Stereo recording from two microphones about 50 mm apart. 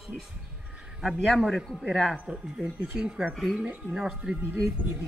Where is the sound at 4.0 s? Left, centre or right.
Centre.